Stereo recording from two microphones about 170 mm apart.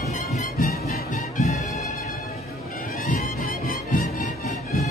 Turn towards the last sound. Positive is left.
turn(degrees=55)  # may be behind; listen again after turning